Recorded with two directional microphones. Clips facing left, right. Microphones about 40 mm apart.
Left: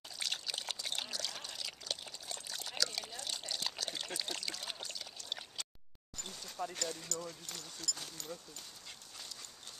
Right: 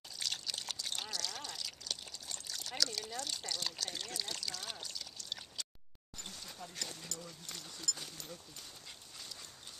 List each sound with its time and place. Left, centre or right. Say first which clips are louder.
0.2 s trickle: left 1 dB; centre
6.6 s a sound: left 12 dB; left
7.2 s speech: left 2 dB; centre